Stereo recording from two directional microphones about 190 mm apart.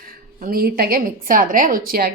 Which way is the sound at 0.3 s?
50° right (ahead or behind).